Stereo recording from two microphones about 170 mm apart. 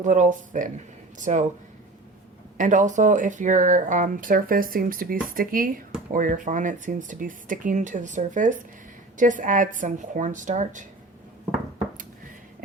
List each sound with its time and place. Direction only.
0.0 s speech: 45° right (ahead or behind)
2.6 s speech: 50° right (ahead or behind)